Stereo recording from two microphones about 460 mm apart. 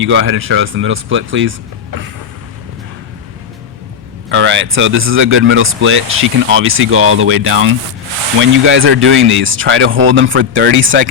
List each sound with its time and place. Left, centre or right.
0.0 s speech: right
4.3 s speech: right